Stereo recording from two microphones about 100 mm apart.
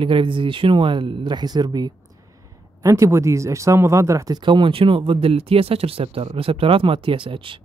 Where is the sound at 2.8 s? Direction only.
30° right (ahead or behind).